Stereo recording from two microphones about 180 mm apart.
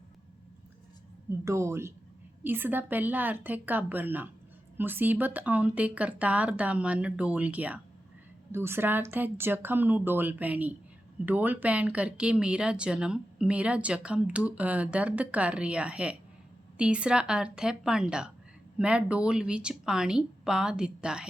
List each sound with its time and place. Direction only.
1.5 s speech: 15° right (ahead or behind)